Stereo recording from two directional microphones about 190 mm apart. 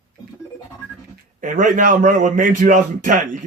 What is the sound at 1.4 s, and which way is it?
A man's voice, 45° right (ahead or behind).